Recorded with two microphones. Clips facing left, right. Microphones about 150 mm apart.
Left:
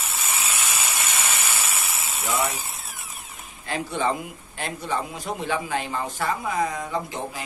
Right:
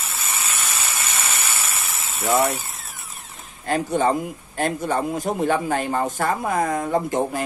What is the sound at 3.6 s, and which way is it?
Speech, 45° right (ahead or behind).